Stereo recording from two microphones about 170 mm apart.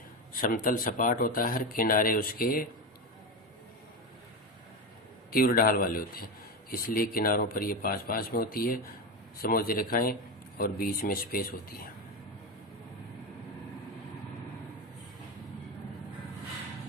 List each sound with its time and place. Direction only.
0.3 s speech: 55° left (ahead or behind)
5.3 s speech: 55° left (ahead or behind)